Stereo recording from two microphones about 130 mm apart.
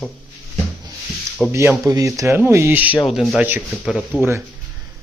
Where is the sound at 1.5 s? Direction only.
20° right (ahead or behind).